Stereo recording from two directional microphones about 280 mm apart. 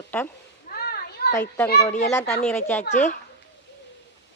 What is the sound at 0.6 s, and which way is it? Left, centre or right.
Children playing, left.